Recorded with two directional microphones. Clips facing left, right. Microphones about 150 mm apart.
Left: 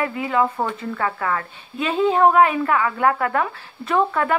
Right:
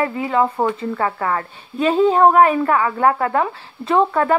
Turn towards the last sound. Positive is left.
turn(degrees=-30)  # may be behind; listen again after turning